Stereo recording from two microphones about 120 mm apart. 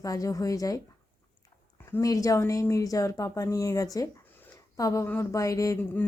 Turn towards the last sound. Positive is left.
turn(degrees=30)  # may be behind; listen again after turning